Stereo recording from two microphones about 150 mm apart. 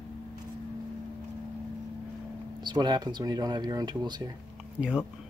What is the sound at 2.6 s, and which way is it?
Speech, 30° right (ahead or behind).